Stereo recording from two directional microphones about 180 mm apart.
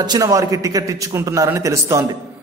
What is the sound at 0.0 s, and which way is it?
A man's voice, 20° right (ahead or behind).